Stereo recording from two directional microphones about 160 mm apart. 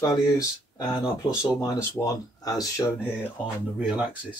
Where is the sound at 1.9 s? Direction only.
20° left (ahead or behind).